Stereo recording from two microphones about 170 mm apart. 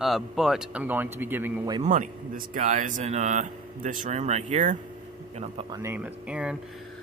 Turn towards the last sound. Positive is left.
turn(degrees=-5)  # may be behind; listen again after turning